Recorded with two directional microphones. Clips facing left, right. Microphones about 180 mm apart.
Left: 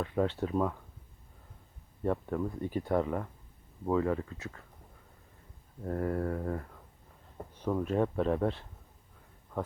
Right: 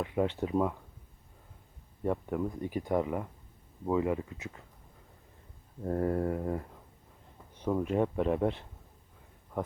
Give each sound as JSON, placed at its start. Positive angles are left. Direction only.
{"t": 0.0, "sound": "speech", "side_deg": -15}
{"t": 2.0, "sound": "speech", "side_deg": -15}
{"t": 5.8, "sound": "mantra", "side_deg": -25}
{"t": 7.7, "sound": "speech", "side_deg": -15}